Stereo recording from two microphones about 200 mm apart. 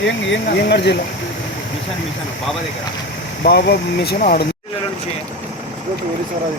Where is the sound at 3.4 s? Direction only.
55° left (ahead or behind).